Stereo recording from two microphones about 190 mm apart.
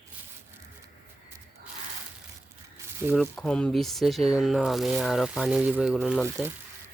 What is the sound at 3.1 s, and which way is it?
Speech, 5° left (ahead or behind).